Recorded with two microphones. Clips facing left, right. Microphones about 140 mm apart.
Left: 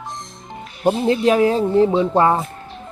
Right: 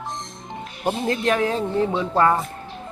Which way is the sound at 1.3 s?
30° left (ahead or behind).